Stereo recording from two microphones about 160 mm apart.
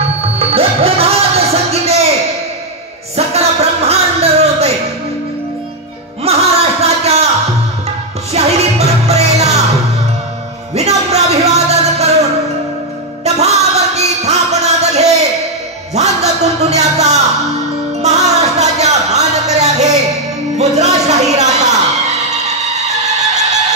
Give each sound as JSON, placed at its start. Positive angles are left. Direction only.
{"t": 0.4, "sound": "music", "side_deg": -35}
{"t": 3.2, "sound": "music", "side_deg": -40}
{"t": 6.2, "sound": "a sound", "side_deg": -40}
{"t": 8.3, "sound": "music", "side_deg": -40}
{"t": 10.7, "sound": "music", "side_deg": -45}
{"t": 15.9, "sound": "a sound", "side_deg": -45}
{"t": 20.5, "sound": "music", "side_deg": -45}